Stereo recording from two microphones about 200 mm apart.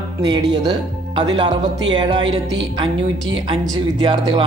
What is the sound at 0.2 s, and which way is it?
Speech, 20° right (ahead or behind).